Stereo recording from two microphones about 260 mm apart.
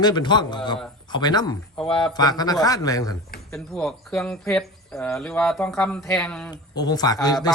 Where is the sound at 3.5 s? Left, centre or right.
Centre.